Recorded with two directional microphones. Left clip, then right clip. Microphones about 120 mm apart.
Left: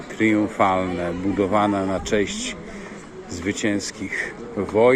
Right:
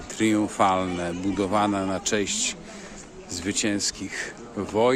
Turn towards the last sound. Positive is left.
turn(degrees=-40)  # may be behind; listen again after turning